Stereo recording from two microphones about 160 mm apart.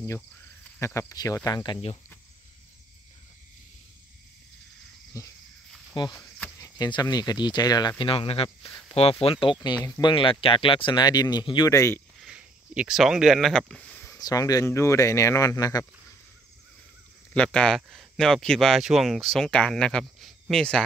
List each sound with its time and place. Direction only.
0.7 s speech: 15° left (ahead or behind)
5.1 s speech: 20° left (ahead or behind)
6.1 s cricket: 15° left (ahead or behind)
6.8 s speech: 25° left (ahead or behind)
12.2 s a sound: 5° right (ahead or behind)
14.1 s speech: 20° left (ahead or behind)
17.3 s speech: 5° left (ahead or behind)